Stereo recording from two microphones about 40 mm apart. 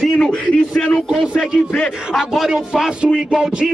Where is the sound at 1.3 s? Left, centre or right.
Left.